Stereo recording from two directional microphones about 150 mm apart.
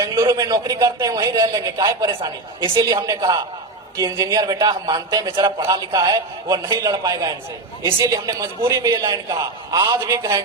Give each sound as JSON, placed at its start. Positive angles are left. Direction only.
{"t": 0.0, "sound": "a man's voice", "side_deg": -20}